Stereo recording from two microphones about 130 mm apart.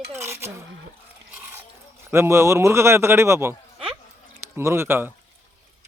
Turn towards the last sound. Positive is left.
turn(degrees=-20)  # may be behind; listen again after turning